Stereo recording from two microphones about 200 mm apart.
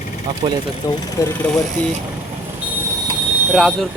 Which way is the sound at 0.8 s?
15° left (ahead or behind).